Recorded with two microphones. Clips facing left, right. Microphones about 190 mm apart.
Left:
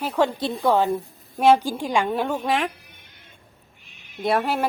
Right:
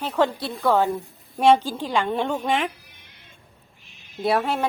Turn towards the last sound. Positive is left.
turn(degrees=0)  # may be behind; listen again after turning